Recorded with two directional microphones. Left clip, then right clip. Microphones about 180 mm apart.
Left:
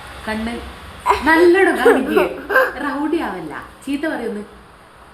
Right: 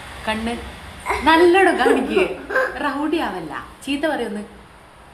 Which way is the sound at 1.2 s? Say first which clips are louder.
Even; 15° left (ahead or behind).